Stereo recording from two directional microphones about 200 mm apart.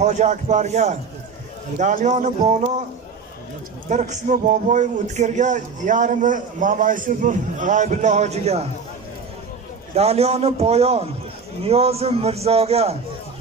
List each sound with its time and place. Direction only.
0.0 s speech: 35° right (ahead or behind)
3.9 s speech: 35° right (ahead or behind)
9.9 s speech: 30° right (ahead or behind)